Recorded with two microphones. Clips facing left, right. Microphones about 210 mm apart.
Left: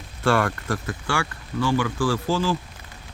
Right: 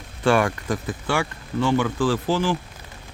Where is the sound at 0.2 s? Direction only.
15° right (ahead or behind).